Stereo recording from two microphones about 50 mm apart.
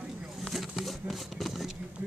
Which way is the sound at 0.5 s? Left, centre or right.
Centre.